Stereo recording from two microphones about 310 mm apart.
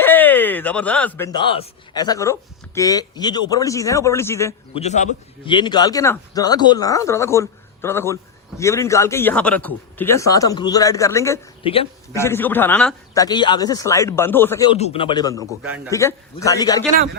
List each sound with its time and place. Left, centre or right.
0.0 s speech: centre
4.8 s a man's voice: left
15.6 s a man's voice: centre
15.9 s speech: centre